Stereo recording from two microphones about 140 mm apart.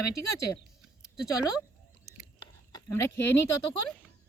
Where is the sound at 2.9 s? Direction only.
15° left (ahead or behind).